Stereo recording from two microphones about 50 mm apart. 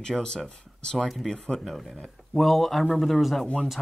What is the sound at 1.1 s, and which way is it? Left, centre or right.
Speech, centre.